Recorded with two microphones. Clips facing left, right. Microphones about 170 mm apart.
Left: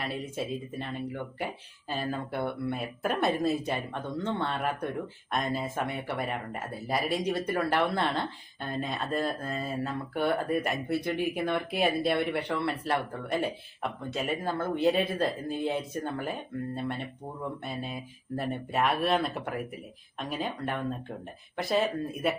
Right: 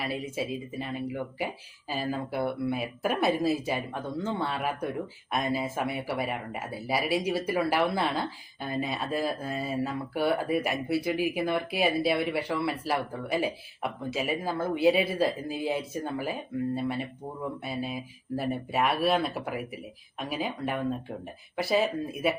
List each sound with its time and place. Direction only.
0.0 s speech: 5° right (ahead or behind)